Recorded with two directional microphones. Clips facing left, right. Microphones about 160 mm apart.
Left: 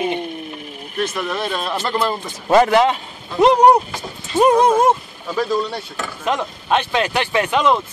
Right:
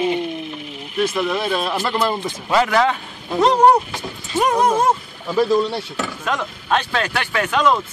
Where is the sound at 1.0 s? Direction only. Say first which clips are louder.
Right 2 dB; 5° right (ahead or behind).